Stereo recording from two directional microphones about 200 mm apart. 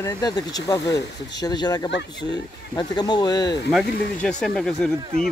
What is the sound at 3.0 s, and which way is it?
Speech, 20° left (ahead or behind).